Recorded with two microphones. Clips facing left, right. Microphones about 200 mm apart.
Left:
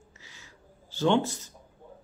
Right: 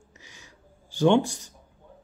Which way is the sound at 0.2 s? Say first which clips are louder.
Right 4 dB; 15° right (ahead or behind).